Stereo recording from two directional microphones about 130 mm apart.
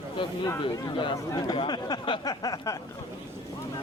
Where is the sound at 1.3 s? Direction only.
30° left (ahead or behind).